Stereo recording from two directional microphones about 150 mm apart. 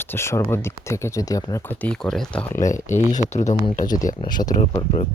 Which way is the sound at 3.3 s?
50° left (ahead or behind).